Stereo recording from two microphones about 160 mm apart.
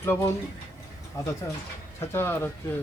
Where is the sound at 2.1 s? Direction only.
15° left (ahead or behind).